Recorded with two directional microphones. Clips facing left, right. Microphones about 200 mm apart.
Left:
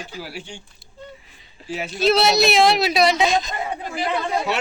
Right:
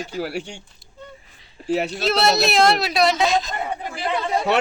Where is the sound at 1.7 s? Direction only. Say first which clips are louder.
Right 7 dB; 65° right (ahead or behind).